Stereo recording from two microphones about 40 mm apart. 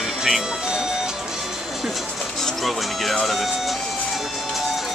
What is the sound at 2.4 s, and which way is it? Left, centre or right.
Speech, centre.